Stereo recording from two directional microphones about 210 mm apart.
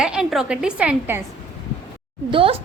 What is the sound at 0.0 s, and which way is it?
A woman's voice, 5° right (ahead or behind).